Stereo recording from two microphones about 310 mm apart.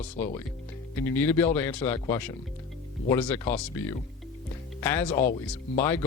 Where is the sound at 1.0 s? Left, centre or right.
Centre.